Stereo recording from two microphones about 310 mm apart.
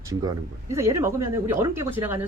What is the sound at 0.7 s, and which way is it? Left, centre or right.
Speech, centre.